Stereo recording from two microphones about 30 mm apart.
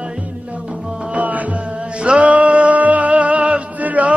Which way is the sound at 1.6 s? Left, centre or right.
Right.